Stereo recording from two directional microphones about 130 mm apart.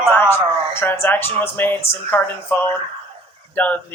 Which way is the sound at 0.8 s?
15° left (ahead or behind).